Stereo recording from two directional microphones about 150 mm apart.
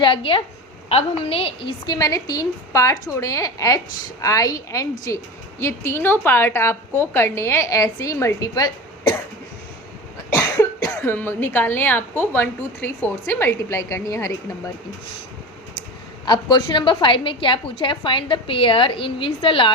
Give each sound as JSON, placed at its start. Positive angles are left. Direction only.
{"t": 0.0, "sound": "a woman's voice", "side_deg": 35}
{"t": 10.2, "sound": "cough", "side_deg": 20}
{"t": 12.2, "sound": "a woman's voice", "side_deg": 15}
{"t": 16.2, "sound": "a woman's voice", "side_deg": 30}